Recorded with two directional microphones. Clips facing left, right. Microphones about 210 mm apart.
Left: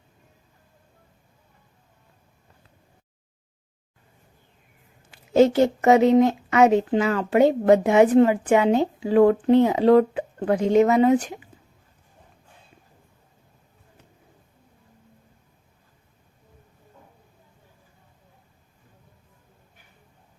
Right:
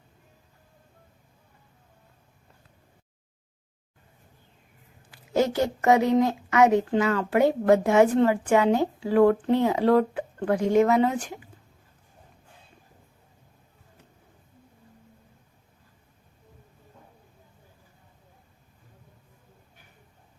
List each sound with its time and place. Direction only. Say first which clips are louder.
5.1 s a woman's voice: left 7 dB; 25° left (ahead or behind)